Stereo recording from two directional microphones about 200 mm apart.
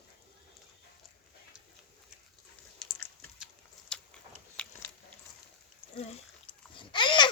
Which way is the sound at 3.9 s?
5° left (ahead or behind).